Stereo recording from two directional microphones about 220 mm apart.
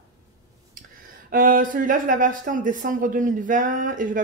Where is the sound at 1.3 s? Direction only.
40° right (ahead or behind).